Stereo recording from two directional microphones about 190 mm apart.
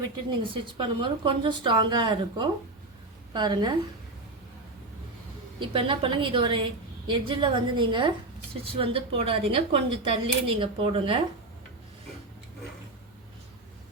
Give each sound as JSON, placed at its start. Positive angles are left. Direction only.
{"t": 0.3, "sound": "speech", "side_deg": -25}
{"t": 5.5, "sound": "speech", "side_deg": -25}